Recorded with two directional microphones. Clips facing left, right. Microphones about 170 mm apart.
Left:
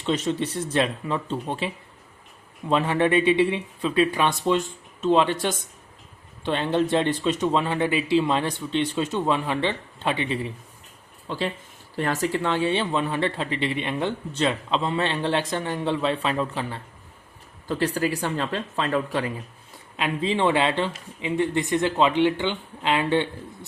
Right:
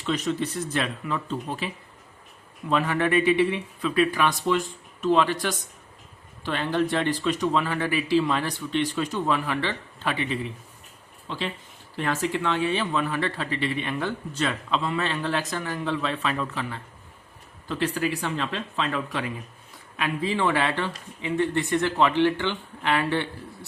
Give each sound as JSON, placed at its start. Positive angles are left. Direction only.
{"t": 0.0, "sound": "speech", "side_deg": 25}
{"t": 11.3, "sound": "speech", "side_deg": 45}
{"t": 20.0, "sound": "speech", "side_deg": 25}